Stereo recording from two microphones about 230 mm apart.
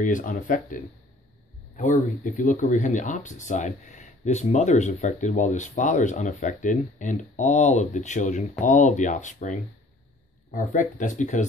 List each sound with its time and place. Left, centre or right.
0.0 s speech: left
1.8 s speech: left